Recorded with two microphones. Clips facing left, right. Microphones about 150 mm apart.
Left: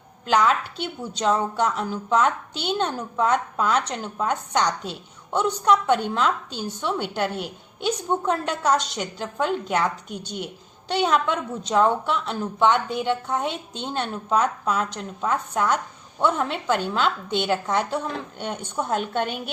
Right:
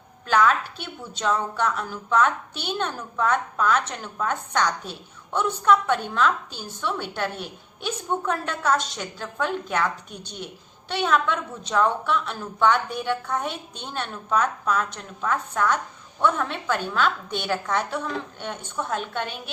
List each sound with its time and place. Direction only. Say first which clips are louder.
0.3 s a woman's voice: even; 25° left (ahead or behind)